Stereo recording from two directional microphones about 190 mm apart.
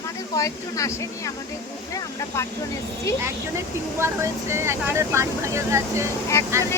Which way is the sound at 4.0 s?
15° right (ahead or behind).